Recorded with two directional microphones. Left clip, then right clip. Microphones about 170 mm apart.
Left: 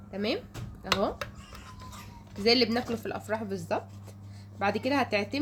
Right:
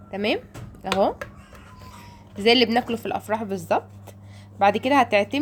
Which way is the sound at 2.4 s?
55° right (ahead or behind).